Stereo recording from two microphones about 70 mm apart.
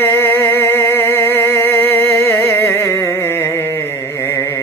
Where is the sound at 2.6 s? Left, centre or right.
Left.